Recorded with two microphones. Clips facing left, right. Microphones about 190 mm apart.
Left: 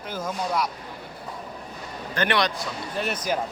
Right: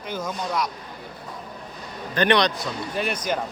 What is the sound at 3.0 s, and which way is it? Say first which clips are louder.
Speech: even; 5° left (ahead or behind).